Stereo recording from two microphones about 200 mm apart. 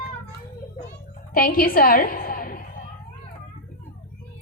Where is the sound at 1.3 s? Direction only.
45° left (ahead or behind).